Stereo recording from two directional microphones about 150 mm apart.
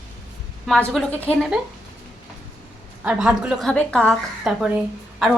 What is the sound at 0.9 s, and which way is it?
Speech, 5° left (ahead or behind).